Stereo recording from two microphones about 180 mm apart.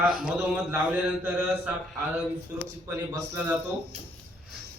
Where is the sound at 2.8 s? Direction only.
15° right (ahead or behind).